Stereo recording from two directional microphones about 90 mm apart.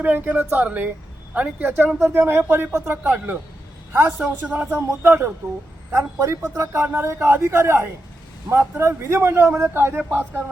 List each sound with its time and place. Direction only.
0.0 s a man's voice: 20° right (ahead or behind)
4.4 s speech: 15° right (ahead or behind)
4.9 s a man's voice: 25° right (ahead or behind)